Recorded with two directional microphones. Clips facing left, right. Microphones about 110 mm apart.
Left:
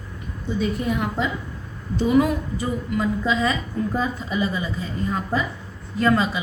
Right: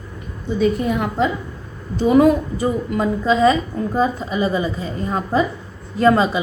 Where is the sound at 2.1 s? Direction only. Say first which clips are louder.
Right 6 dB; 40° right (ahead or behind).